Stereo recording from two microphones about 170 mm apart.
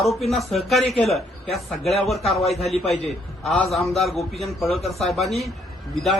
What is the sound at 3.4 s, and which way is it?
A man's voice, centre (ahead or behind).